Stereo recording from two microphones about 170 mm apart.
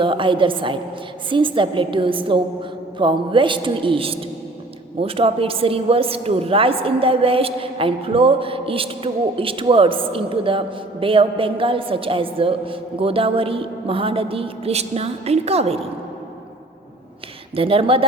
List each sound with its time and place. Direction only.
0.0 s a woman's voice: 30° right (ahead or behind)
17.5 s a woman's voice: 35° right (ahead or behind)